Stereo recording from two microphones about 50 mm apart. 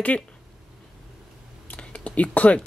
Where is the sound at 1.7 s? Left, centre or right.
Left.